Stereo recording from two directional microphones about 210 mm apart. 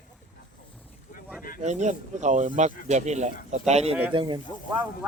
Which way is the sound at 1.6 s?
35° right (ahead or behind).